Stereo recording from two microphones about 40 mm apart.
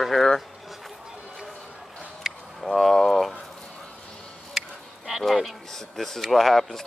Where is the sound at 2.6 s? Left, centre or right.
Centre.